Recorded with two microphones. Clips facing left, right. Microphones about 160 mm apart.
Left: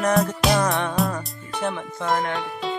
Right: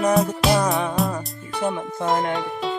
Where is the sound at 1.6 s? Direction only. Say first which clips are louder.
Right 3 dB; 20° right (ahead or behind).